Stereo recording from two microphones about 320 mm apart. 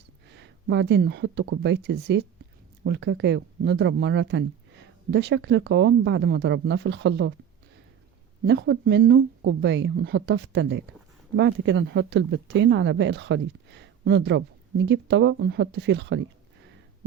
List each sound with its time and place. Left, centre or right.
0.3 s speech: right
8.4 s speech: right